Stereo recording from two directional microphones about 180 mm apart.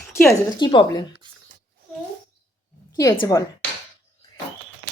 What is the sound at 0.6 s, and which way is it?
Speech, 25° left (ahead or behind).